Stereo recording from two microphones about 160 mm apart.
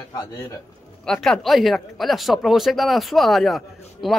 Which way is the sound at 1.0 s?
5° left (ahead or behind).